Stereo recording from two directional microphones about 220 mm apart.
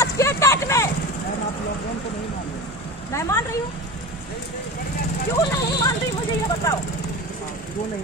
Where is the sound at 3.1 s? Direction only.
15° left (ahead or behind).